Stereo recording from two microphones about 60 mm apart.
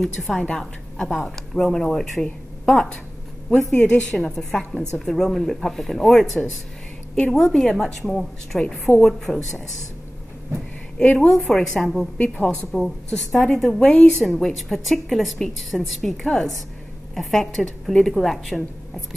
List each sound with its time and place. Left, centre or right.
0.0 s a woman's voice: centre
11.1 s a woman's voice: centre
12.2 s a woman's voice: left
12.7 s a woman's voice: centre
14.4 s a woman's voice: centre